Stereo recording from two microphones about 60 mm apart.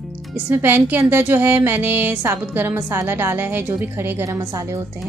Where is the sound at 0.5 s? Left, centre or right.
Right.